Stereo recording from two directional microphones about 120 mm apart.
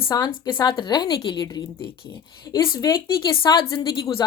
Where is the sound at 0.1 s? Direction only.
35° left (ahead or behind).